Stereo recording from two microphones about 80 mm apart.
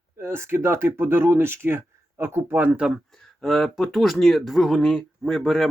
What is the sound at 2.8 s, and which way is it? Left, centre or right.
Speech, centre.